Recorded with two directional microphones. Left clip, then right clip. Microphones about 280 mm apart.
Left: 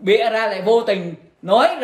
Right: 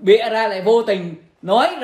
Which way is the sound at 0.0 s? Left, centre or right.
Centre.